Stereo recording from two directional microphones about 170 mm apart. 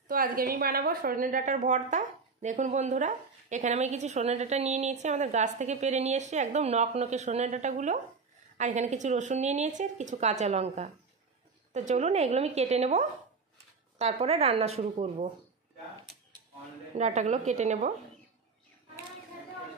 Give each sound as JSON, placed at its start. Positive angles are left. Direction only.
{"t": 0.1, "sound": "a woman's voice", "side_deg": -55}
{"t": 16.9, "sound": "a woman's voice", "side_deg": -45}